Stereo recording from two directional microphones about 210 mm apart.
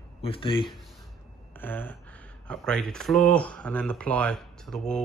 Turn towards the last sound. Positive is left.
turn(degrees=5)  # may be behind; listen again after turning